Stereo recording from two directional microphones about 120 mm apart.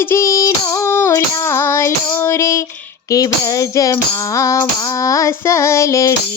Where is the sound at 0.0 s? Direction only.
20° left (ahead or behind).